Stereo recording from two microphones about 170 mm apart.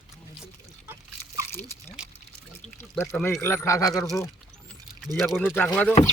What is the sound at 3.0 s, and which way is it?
A man's voice, 10° left (ahead or behind).